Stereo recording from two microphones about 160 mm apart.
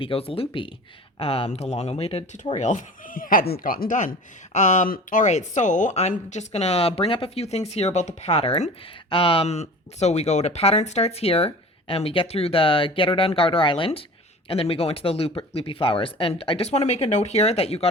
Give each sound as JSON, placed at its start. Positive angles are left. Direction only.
{"t": 0.0, "sound": "speech", "side_deg": 35}